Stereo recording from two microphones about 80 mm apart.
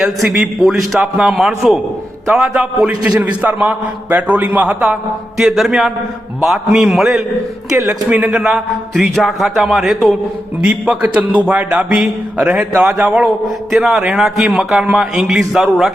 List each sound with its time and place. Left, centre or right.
0.0 s a man's voice: centre
5.4 s a man's voice: centre
7.9 s speech: right
8.3 s a man's voice: centre
10.6 s a man's voice: centre